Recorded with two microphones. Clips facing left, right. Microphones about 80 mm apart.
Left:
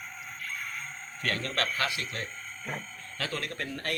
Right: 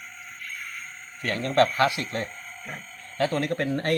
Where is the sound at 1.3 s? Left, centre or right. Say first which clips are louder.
Right 6 dB; centre.